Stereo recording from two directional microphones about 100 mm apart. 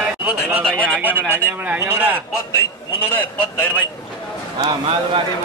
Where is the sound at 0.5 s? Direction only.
15° right (ahead or behind).